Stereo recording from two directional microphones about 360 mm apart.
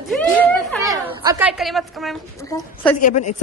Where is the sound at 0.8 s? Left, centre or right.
Centre.